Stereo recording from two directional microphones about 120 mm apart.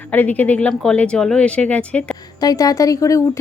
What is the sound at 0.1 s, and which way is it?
A woman's voice, 15° left (ahead or behind).